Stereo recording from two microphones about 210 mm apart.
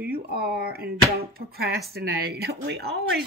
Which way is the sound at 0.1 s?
45° right (ahead or behind).